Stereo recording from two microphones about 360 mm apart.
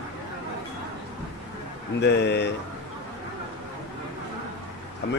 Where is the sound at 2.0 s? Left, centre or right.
Left.